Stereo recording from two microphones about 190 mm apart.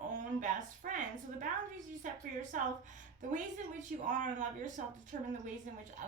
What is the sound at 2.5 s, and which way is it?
Speech, 40° right (ahead or behind).